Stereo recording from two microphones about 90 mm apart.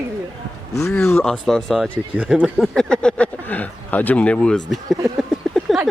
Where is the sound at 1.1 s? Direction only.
5° left (ahead or behind).